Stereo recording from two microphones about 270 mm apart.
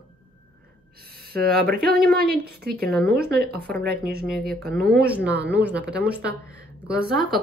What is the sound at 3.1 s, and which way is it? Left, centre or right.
Speech, right.